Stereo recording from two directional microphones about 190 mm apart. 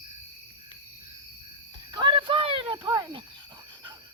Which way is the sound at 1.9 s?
25° right (ahead or behind).